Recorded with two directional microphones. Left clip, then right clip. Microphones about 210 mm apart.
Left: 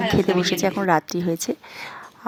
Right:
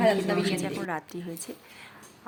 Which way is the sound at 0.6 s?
25° left (ahead or behind).